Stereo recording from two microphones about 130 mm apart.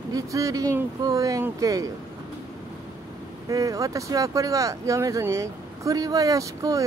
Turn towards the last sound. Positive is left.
turn(degrees=-25)  # may be behind; listen again after turning